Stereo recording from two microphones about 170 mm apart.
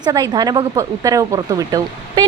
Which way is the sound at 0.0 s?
25° right (ahead or behind).